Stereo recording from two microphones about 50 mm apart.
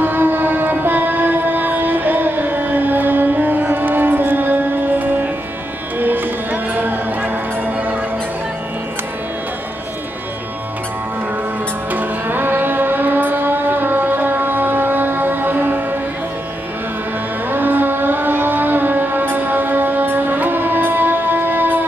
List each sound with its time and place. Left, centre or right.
0.0 s music: right
11.9 s music: right
17.5 s a sound: right